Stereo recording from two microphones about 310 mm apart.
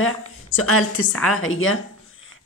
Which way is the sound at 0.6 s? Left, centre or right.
Left.